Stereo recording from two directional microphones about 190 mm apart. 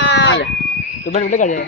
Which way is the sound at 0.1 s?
65° left (ahead or behind).